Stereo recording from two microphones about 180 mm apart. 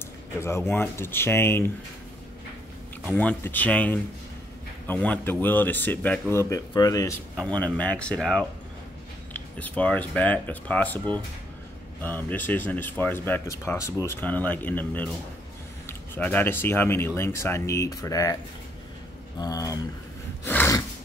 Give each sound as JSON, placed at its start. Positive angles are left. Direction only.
{"t": 0.4, "sound": "speech", "side_deg": 15}
{"t": 3.1, "sound": "speech", "side_deg": 10}
{"t": 7.3, "sound": "speech", "side_deg": 5}
{"t": 19.4, "sound": "speech", "side_deg": 20}
{"t": 20.4, "sound": "a sound", "side_deg": 10}